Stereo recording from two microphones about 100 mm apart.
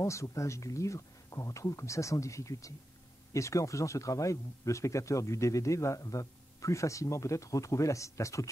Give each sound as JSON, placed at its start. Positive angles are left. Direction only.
{"t": 0.0, "sound": "speech", "side_deg": 30}